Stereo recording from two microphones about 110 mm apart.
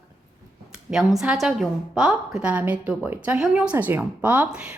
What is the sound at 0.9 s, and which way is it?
A woman's voice, 5° right (ahead or behind).